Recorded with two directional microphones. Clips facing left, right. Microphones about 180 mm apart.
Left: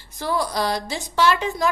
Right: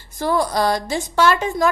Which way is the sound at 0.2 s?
50° right (ahead or behind).